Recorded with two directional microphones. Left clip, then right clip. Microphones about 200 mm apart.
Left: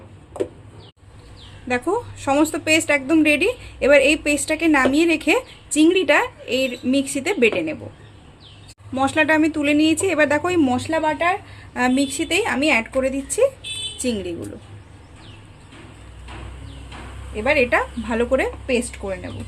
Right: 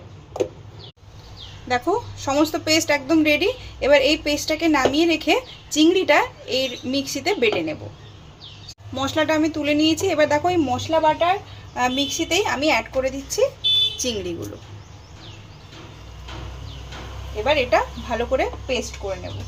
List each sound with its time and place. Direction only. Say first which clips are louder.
1.6 s a woman's voice: even; 20° left (ahead or behind)
9.0 s a woman's voice: left 3 dB; 25° left (ahead or behind)
13.9 s a sound: even; 20° left (ahead or behind)
17.4 s a woman's voice: left 1 dB; 35° left (ahead or behind)